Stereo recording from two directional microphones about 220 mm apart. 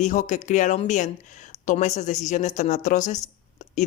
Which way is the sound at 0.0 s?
35° left (ahead or behind).